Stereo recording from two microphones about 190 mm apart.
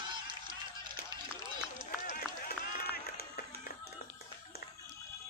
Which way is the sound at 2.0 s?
45° left (ahead or behind).